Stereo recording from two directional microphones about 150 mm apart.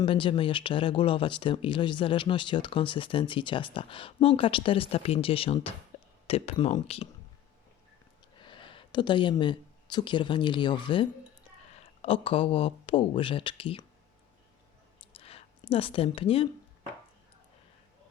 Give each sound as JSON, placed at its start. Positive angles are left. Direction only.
{"t": 0.0, "sound": "speech", "side_deg": 35}
{"t": 8.4, "sound": "speech", "side_deg": 35}
{"t": 12.0, "sound": "speech", "side_deg": 40}
{"t": 15.1, "sound": "a sound", "side_deg": 40}